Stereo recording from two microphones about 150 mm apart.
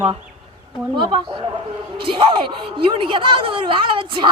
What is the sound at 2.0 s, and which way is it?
Speech, 35° right (ahead or behind).